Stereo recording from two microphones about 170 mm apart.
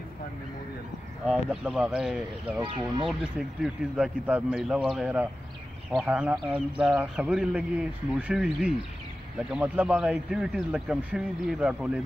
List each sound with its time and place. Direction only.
1.2 s speech: 5° right (ahead or behind)
2.6 s speech: 30° right (ahead or behind)
3.1 s speech: 5° right (ahead or behind)